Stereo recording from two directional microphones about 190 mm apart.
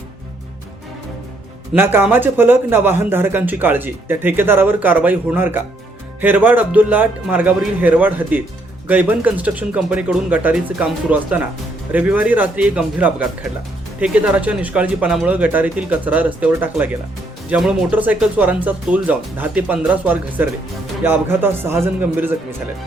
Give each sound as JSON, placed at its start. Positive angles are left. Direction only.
{"t": 1.7, "sound": "a man's voice", "side_deg": -10}